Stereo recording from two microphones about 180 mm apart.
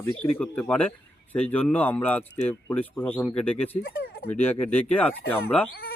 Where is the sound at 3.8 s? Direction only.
55° left (ahead or behind).